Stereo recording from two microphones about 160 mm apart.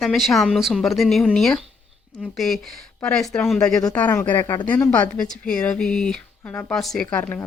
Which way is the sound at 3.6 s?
20° left (ahead or behind).